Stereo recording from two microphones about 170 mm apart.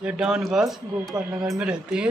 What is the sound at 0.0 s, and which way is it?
Speech, 5° right (ahead or behind).